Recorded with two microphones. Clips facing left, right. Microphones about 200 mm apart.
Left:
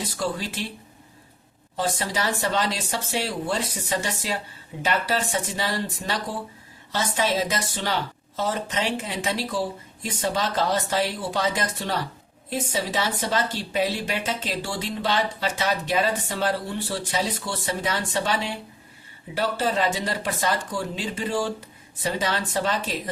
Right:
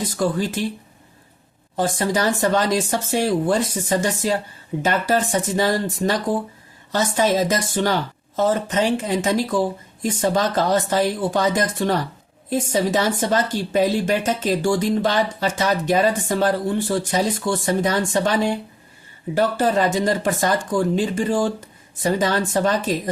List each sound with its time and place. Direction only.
0.0 s speech: 50° right (ahead or behind)
1.7 s speech: 50° right (ahead or behind)